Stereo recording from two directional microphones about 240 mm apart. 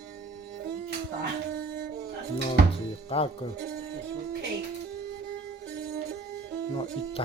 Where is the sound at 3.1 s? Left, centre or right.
Left.